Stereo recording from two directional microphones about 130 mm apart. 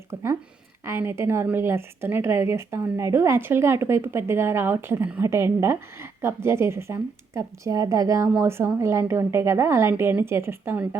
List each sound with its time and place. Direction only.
0.1 s a woman's voice: 20° right (ahead or behind)